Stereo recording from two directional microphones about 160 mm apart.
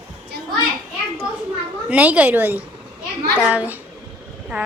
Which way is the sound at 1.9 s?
10° right (ahead or behind).